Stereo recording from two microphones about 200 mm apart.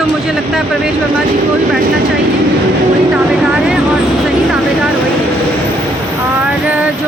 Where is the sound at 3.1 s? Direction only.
Centre (ahead or behind).